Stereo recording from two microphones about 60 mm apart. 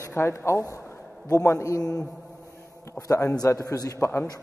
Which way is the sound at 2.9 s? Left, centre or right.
Left.